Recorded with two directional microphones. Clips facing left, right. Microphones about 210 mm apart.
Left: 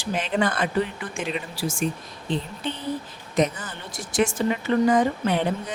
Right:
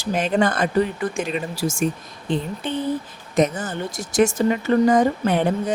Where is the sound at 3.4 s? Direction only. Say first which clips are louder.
Right 4 dB; 45° right (ahead or behind).